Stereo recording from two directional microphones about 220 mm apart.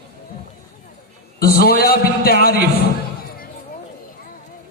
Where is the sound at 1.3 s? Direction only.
45° left (ahead or behind).